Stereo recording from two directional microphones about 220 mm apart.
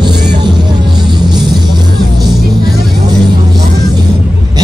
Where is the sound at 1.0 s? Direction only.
20° right (ahead or behind).